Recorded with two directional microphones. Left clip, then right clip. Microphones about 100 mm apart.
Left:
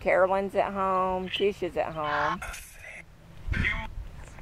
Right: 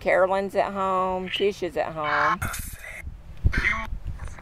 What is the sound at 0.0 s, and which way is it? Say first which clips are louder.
Speech: right 2 dB; 20° right (ahead or behind).